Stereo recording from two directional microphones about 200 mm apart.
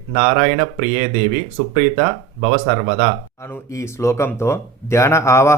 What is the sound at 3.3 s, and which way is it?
Speech, 15° left (ahead or behind).